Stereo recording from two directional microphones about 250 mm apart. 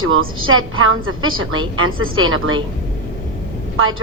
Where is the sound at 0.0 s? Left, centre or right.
Right.